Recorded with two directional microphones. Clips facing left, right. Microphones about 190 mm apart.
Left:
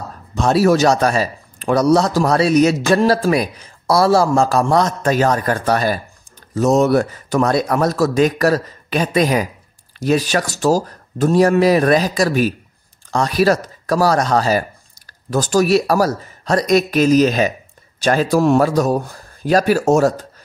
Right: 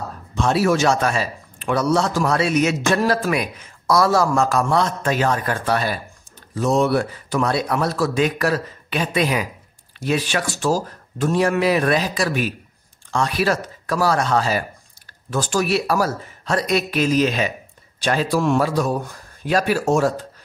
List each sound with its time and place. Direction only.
0.4 s a man's voice: 40° left (ahead or behind)